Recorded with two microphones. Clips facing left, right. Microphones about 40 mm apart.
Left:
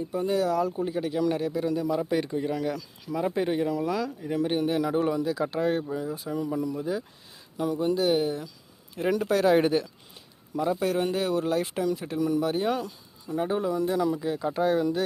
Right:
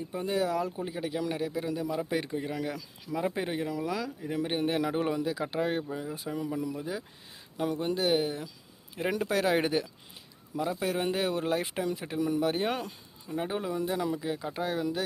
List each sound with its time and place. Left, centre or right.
0.1 s speech: centre
0.8 s speech: centre
7.5 s speech: right; by 11.1 s centre
11.1 s speech: right
13.3 s speech: centre
14.1 s speech: centre